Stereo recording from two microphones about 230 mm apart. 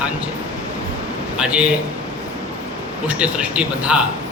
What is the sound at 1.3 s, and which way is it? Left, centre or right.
Speech, centre.